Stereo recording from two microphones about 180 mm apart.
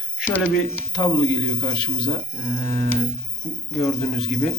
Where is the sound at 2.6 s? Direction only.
15° left (ahead or behind).